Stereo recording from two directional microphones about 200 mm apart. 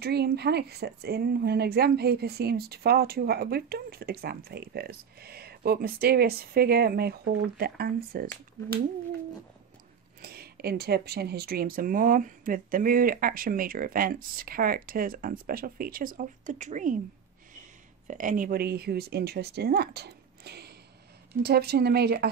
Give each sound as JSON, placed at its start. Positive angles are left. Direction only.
{"t": 0.0, "sound": "speech", "side_deg": -55}
{"t": 10.2, "sound": "speech", "side_deg": -50}
{"t": 18.0, "sound": "speech", "side_deg": -40}